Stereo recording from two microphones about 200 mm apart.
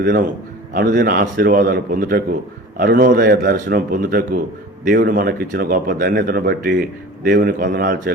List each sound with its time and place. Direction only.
0.0 s speech: 45° right (ahead or behind)